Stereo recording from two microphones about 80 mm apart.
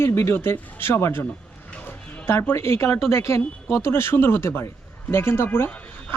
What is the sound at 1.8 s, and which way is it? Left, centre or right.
Music, left.